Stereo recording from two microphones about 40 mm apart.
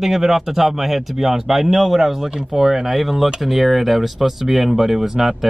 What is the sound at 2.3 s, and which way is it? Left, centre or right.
Speech, centre.